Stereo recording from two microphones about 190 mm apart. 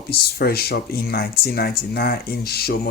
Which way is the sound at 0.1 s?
55° left (ahead or behind).